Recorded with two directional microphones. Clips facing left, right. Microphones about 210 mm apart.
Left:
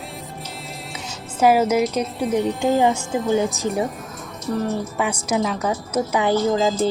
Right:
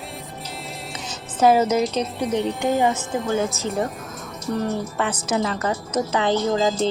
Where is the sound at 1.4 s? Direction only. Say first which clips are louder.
Left 1 dB; 10° left (ahead or behind).